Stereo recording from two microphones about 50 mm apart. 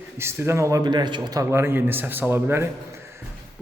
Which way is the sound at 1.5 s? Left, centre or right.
Right.